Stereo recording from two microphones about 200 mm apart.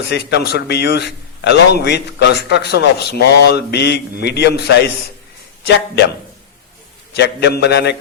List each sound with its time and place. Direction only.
0.1 s a man's voice: 55° left (ahead or behind)
7.1 s a man's voice: 55° left (ahead or behind)